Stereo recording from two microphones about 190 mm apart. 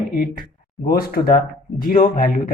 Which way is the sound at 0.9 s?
50° left (ahead or behind).